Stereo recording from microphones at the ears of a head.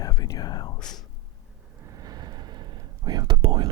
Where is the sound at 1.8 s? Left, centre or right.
Right.